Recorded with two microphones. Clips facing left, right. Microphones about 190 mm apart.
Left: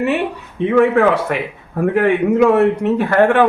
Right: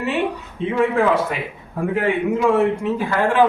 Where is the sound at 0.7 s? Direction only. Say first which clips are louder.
Left 5 dB; 65° left (ahead or behind).